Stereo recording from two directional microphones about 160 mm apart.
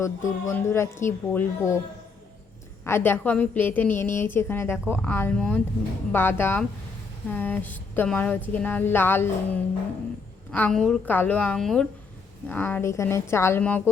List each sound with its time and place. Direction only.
0.0 s a woman's voice: 15° left (ahead or behind)
2.8 s a woman's voice: 15° left (ahead or behind)